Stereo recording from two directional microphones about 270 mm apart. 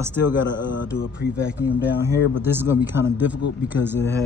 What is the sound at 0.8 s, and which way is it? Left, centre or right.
Mantra, left.